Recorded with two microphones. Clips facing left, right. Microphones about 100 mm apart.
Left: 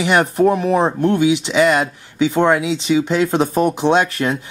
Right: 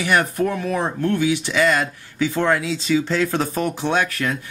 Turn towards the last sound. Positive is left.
turn(degrees=25)  # may be behind; listen again after turning